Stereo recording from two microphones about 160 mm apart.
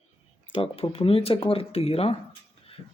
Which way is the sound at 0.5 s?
35° left (ahead or behind).